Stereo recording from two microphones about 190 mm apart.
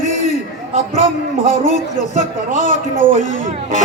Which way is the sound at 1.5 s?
40° left (ahead or behind).